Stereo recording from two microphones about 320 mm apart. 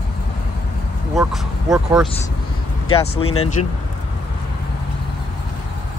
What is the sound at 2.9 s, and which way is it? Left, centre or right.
Speech, centre.